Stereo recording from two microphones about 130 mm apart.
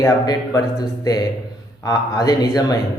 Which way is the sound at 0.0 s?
25° left (ahead or behind).